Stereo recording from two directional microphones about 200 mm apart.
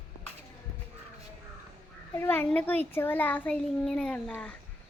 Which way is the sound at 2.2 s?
10° left (ahead or behind).